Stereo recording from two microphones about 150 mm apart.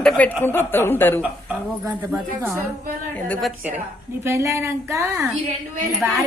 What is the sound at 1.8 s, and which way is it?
Speech, 10° right (ahead or behind).